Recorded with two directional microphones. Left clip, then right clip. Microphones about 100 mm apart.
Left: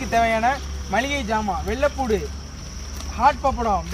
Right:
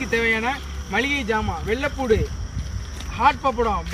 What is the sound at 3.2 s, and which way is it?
Speech, 50° left (ahead or behind).